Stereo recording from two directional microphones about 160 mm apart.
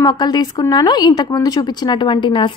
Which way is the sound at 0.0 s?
25° left (ahead or behind).